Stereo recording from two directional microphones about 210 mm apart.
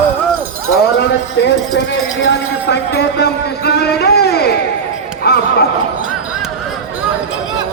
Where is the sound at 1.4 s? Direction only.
60° left (ahead or behind).